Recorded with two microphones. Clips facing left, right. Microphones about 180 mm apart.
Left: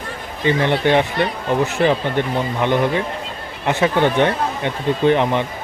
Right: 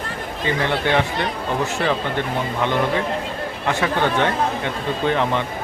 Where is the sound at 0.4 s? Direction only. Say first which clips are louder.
Left 5 dB; 20° left (ahead or behind).